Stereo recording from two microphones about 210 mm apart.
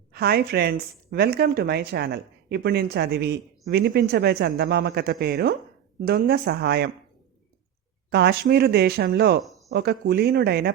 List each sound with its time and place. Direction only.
0.1 s a woman's voice: 50° right (ahead or behind)
8.1 s a woman's voice: 50° right (ahead or behind)
9.4 s a sound: centre (ahead or behind)
9.7 s a woman's voice: 50° right (ahead or behind)